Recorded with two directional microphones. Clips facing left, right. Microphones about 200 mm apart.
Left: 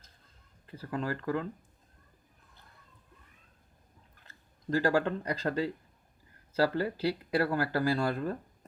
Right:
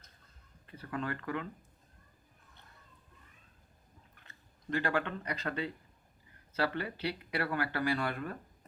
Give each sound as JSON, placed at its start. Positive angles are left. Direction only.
{"t": 0.7, "sound": "speech", "side_deg": 30}
{"t": 4.3, "sound": "speech", "side_deg": 35}